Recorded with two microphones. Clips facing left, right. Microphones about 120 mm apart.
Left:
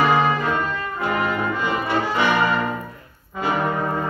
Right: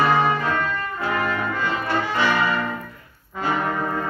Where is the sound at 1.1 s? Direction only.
15° left (ahead or behind).